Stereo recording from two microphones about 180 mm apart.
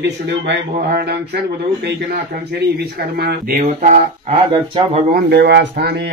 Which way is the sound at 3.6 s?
35° right (ahead or behind).